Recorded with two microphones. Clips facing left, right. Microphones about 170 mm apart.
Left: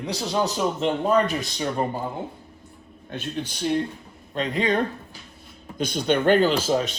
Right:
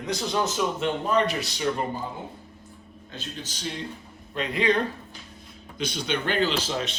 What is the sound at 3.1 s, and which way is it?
Speech, 60° left (ahead or behind).